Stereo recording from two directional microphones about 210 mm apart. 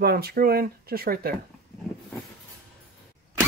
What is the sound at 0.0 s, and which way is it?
Speech, 45° right (ahead or behind).